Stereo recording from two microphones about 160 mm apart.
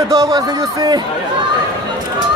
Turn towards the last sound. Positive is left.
turn(degrees=-20)  # may be behind; listen again after turning